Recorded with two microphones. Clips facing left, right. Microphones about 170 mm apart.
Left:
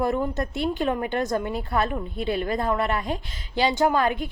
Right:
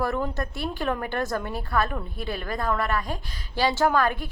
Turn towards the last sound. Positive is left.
turn(degrees=20)  # may be behind; listen again after turning